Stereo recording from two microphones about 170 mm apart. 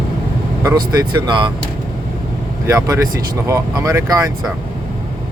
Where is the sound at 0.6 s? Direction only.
20° right (ahead or behind).